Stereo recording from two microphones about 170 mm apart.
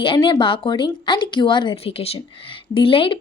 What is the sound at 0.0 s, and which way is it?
Speech, 30° left (ahead or behind).